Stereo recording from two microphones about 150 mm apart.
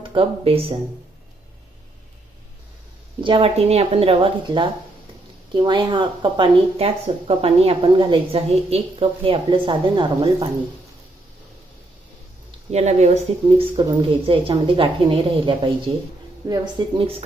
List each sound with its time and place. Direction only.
0.1 s speech: 40° right (ahead or behind)
3.2 s speech: 35° right (ahead or behind)
12.7 s speech: 50° right (ahead or behind)